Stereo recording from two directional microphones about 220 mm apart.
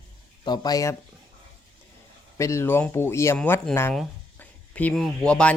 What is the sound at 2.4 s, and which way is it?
Speech, 15° left (ahead or behind).